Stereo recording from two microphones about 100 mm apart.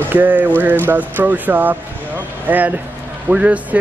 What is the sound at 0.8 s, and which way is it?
Speech, 20° right (ahead or behind).